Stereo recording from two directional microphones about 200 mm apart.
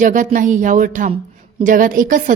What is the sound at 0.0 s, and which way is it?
A woman's voice, 40° right (ahead or behind).